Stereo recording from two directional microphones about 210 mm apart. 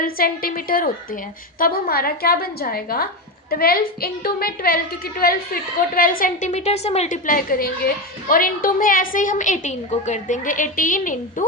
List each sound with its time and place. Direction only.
0.0 s a woman's voice: 45° left (ahead or behind)